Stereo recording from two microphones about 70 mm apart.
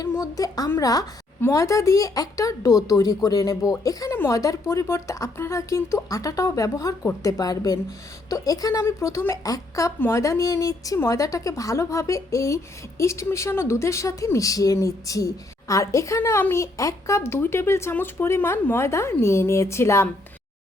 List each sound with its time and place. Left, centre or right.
0.2 s speech: left
1.4 s speech: left
8.8 s speech: left
9.3 s speech: left